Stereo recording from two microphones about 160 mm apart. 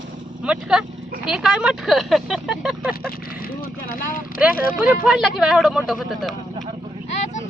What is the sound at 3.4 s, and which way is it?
Speech, 65° left (ahead or behind).